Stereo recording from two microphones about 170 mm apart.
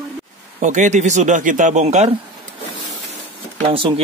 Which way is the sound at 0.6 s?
45° right (ahead or behind).